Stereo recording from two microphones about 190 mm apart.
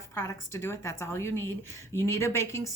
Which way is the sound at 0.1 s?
15° left (ahead or behind).